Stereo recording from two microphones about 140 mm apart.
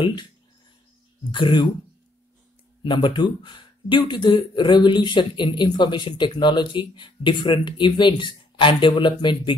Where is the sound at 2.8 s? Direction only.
35° left (ahead or behind).